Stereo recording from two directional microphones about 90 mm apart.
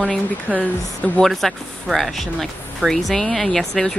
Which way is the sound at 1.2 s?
Centre (ahead or behind).